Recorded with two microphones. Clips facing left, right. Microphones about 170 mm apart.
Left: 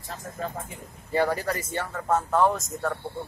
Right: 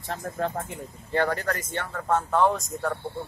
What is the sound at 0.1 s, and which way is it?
Speech, 70° right (ahead or behind).